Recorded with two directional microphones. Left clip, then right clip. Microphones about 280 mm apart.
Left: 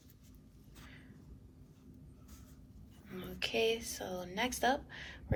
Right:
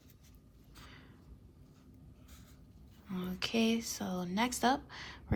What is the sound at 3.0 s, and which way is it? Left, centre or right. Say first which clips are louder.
Speech: right 1 dB; right.